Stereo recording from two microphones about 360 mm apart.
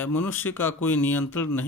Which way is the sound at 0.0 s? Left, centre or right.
Centre.